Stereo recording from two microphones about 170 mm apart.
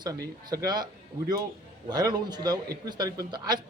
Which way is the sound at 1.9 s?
25° right (ahead or behind).